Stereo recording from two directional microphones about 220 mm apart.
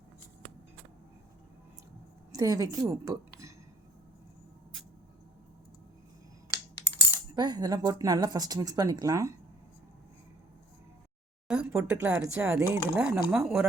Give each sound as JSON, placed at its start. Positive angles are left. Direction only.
{"t": 2.3, "sound": "a woman's voice", "side_deg": -15}
{"t": 7.3, "sound": "speech", "side_deg": -20}
{"t": 11.4, "sound": "speech", "side_deg": -5}